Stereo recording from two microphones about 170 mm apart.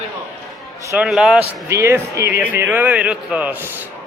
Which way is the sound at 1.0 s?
5° right (ahead or behind).